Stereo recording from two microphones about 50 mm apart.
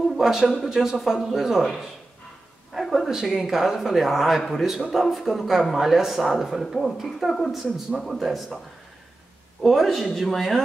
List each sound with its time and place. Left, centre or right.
0.0 s speech: centre
9.6 s speech: centre